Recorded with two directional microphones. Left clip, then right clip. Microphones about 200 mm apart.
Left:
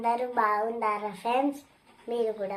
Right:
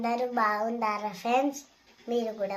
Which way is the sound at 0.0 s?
10° right (ahead or behind).